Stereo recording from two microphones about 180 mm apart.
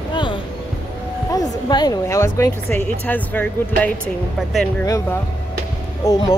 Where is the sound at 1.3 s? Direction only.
20° left (ahead or behind).